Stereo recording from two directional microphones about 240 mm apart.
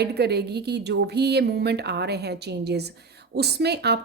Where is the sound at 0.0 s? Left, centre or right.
Right.